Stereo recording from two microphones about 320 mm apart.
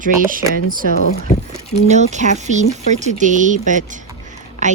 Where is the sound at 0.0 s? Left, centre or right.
Right.